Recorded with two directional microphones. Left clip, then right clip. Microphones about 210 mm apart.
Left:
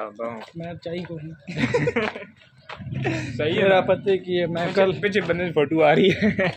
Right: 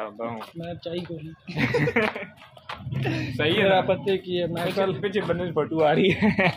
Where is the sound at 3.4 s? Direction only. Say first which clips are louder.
Even; 25° right (ahead or behind).